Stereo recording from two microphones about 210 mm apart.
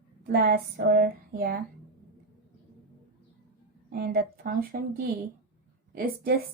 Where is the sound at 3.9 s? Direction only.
45° right (ahead or behind).